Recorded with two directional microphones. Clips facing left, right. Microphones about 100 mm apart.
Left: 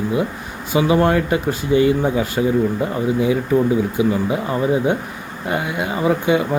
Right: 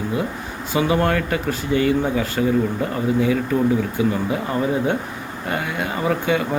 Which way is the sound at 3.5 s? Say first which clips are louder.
Left 3 dB; 15° left (ahead or behind).